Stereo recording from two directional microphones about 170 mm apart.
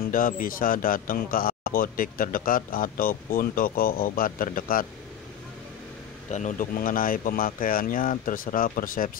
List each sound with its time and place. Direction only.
0.1 s a man's voice: 55° left (ahead or behind)
6.2 s a man's voice: 45° left (ahead or behind)